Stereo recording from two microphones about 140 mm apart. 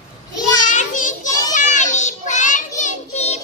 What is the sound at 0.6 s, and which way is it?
Child singing, 60° left (ahead or behind).